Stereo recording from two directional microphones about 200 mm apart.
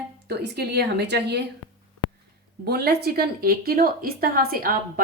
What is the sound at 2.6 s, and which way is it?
A woman's voice, 50° right (ahead or behind).